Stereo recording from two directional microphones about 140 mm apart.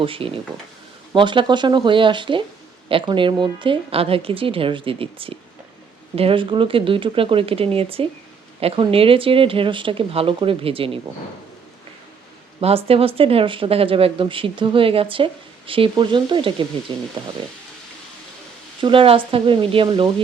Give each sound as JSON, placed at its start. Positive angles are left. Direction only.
{"t": 0.0, "sound": "speech", "side_deg": -40}
{"t": 12.5, "sound": "speech", "side_deg": -45}
{"t": 18.8, "sound": "speech", "side_deg": -40}